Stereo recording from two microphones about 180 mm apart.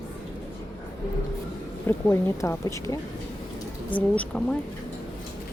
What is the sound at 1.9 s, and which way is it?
Speech, 15° left (ahead or behind).